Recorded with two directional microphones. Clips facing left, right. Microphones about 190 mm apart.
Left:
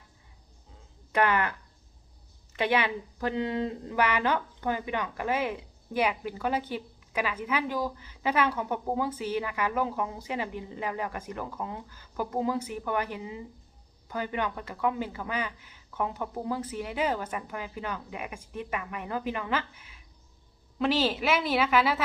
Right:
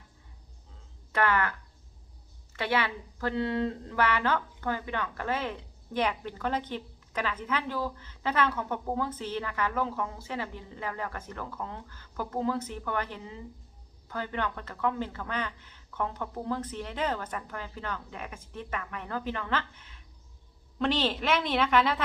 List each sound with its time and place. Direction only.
1.1 s a woman's voice: 15° left (ahead or behind)
2.6 s a woman's voice: 15° left (ahead or behind)